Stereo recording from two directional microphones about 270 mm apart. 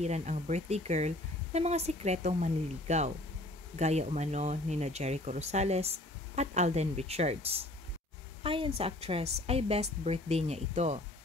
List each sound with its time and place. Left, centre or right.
0.0 s speech: right